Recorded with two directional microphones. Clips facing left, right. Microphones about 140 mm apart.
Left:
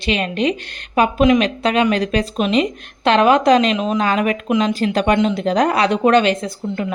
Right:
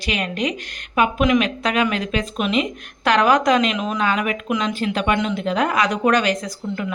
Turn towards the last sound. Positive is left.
turn(degrees=25)  # may be behind; listen again after turning